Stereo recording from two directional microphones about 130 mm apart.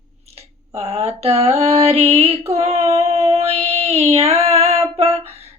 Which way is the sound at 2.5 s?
55° right (ahead or behind).